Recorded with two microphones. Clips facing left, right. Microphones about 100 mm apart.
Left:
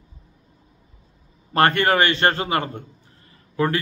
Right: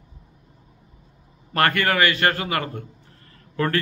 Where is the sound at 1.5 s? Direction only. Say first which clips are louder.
Left 3 dB; 30° left (ahead or behind).